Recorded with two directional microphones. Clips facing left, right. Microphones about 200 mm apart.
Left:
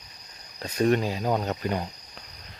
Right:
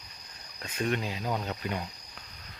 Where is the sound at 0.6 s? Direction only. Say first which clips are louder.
Left 8 dB; 40° left (ahead or behind).